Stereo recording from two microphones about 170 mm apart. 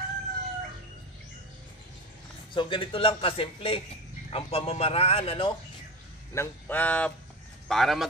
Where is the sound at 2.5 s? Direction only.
30° left (ahead or behind).